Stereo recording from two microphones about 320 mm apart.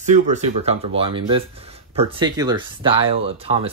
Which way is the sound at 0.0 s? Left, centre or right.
Right.